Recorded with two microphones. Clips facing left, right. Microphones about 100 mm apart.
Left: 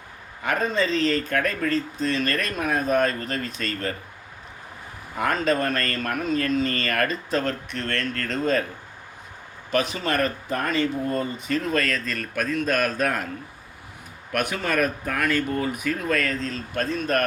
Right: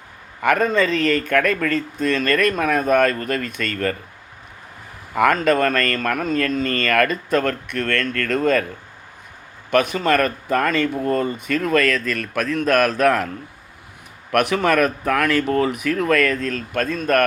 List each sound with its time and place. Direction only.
0.4 s speech: 65° right (ahead or behind)
5.1 s speech: 70° right (ahead or behind)
9.7 s speech: 55° right (ahead or behind)
10.2 s speech: 75° right (ahead or behind)
14.3 s speech: 80° right; by 17.0 s 55° right (ahead or behind)